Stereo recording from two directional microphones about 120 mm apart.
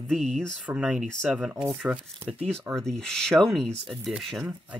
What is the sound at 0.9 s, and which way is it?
Speech, 5° right (ahead or behind).